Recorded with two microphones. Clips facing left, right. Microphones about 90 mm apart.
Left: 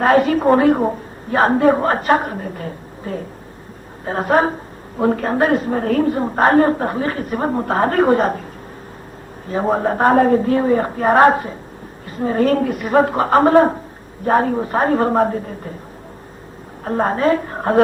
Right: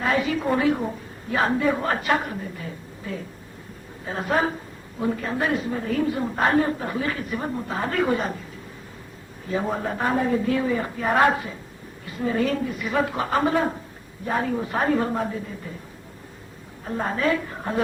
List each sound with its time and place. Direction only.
0.0 s a woman's voice: 50° left (ahead or behind)
4.9 s a woman's voice: 60° left (ahead or behind)
7.0 s a woman's voice: 40° left (ahead or behind)
9.5 s a woman's voice: 40° left (ahead or behind)
16.8 s a woman's voice: 50° left (ahead or behind)